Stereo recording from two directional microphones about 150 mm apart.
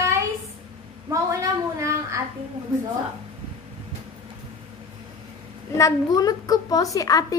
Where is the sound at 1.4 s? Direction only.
20° right (ahead or behind).